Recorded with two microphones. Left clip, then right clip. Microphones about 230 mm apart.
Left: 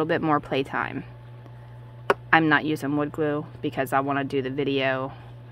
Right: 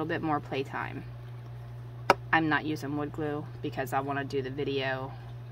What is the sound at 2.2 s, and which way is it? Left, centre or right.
Speech, left.